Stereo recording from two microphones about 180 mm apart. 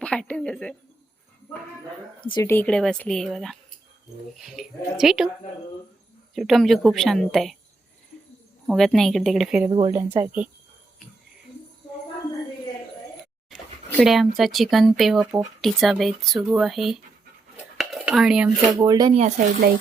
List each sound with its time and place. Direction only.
0.0 s a woman's voice: 5° left (ahead or behind)
2.4 s speech: 10° left (ahead or behind)
6.3 s speech: centre (ahead or behind)
8.6 s speech: centre (ahead or behind)
9.6 s speech: 30° right (ahead or behind)
9.9 s speech: 10° right (ahead or behind)
14.0 s speech: centre (ahead or behind)
17.7 s dishes: 5° right (ahead or behind)
18.4 s speech: 20° right (ahead or behind)
19.4 s speech: 40° right (ahead or behind)